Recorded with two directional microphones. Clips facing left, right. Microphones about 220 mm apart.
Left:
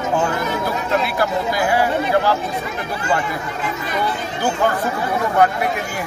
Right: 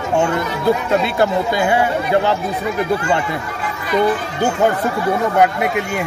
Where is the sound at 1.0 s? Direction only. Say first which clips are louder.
Right 4 dB; 25° right (ahead or behind).